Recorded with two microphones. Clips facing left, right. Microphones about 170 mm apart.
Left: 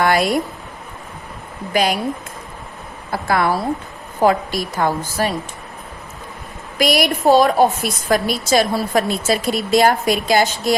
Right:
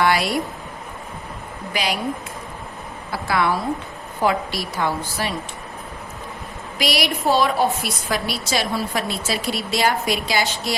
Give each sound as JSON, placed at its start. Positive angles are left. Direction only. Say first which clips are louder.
{"t": 0.0, "sound": "a sound", "louder": "left 3 dB", "side_deg": 50}
{"t": 1.7, "sound": "a woman's voice", "louder": "left 7 dB", "side_deg": 50}
{"t": 3.1, "sound": "a woman's voice", "louder": "left 3 dB", "side_deg": 50}
{"t": 6.7, "sound": "a woman's voice", "louder": "left 6 dB", "side_deg": 50}